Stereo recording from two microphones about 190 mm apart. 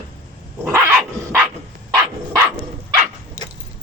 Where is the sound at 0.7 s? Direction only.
15° right (ahead or behind).